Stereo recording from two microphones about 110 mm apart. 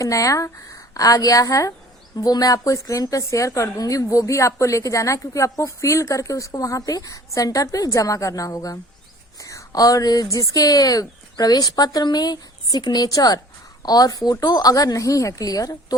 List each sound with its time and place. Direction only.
0.0 s a woman's voice: 30° left (ahead or behind)